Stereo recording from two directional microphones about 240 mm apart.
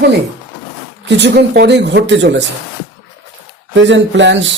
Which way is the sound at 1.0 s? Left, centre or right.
Right.